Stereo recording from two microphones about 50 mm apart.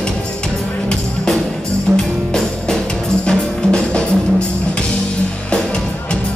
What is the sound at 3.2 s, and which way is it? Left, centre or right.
Music, centre.